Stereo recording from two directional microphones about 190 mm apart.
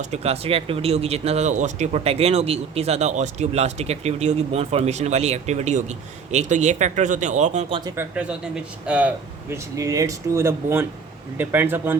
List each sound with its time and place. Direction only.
0.0 s speech: 35° right (ahead or behind)
7.9 s speech: 10° right (ahead or behind)